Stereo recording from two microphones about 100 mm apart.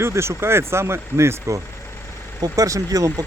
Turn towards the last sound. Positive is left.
turn(degrees=-35)  # may be behind; listen again after turning